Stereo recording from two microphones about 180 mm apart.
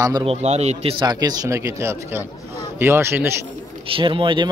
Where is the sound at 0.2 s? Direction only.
35° right (ahead or behind); by 3.3 s 15° right (ahead or behind).